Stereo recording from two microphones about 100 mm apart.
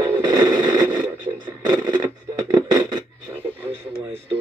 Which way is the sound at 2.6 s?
45° right (ahead or behind).